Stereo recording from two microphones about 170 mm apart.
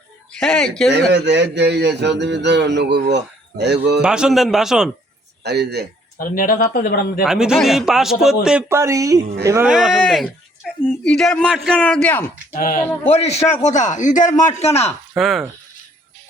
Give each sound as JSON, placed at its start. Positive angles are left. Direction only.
{"t": 0.3, "sound": "speech", "side_deg": 5}
{"t": 1.1, "sound": "speech", "side_deg": -90}
{"t": 4.0, "sound": "speech", "side_deg": -5}
{"t": 5.4, "sound": "a man's voice", "side_deg": -75}
{"t": 6.1, "sound": "speech", "side_deg": 55}
{"t": 7.3, "sound": "speech", "side_deg": -5}
{"t": 9.6, "sound": "speech", "side_deg": -5}
{"t": 12.5, "sound": "speech", "side_deg": 55}
{"t": 13.1, "sound": "speech", "side_deg": 40}
{"t": 15.1, "sound": "speech", "side_deg": 0}